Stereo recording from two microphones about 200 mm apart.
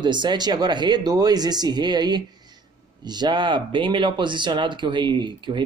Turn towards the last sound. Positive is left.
turn(degrees=-25)  # may be behind; listen again after turning